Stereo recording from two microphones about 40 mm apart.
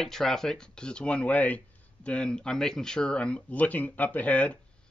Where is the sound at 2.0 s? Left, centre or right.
Left.